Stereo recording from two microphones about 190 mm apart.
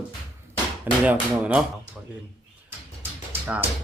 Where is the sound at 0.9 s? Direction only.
10° right (ahead or behind).